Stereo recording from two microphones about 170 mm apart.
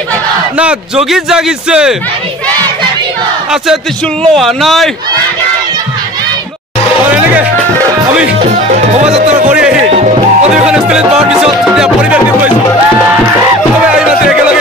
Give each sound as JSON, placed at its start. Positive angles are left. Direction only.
{"t": 0.6, "sound": "a man's voice", "side_deg": -5}
{"t": 4.4, "sound": "a man's voice", "side_deg": 0}
{"t": 7.0, "sound": "music", "side_deg": -10}
{"t": 8.5, "sound": "music", "side_deg": -40}
{"t": 9.5, "sound": "music", "side_deg": -5}
{"t": 13.9, "sound": "music", "side_deg": -5}